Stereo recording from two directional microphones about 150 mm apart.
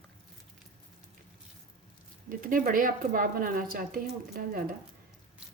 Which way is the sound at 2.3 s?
65° right (ahead or behind).